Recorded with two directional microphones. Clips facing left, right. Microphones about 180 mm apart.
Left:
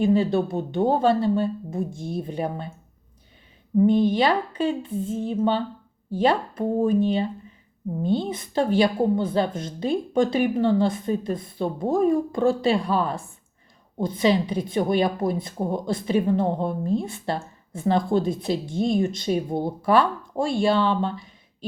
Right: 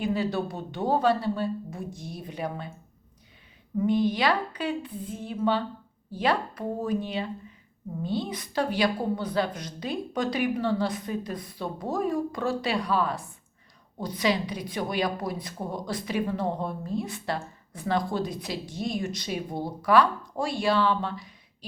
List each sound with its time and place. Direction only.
0.0 s a woman's voice: 25° left (ahead or behind)
3.8 s a woman's voice: 25° left (ahead or behind)